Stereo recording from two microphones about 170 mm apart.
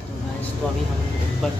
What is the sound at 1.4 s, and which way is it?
Speech, centre (ahead or behind).